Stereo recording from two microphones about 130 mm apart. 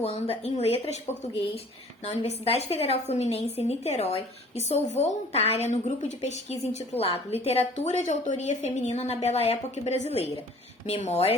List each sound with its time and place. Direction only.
0.0 s a woman's voice: 50° left (ahead or behind)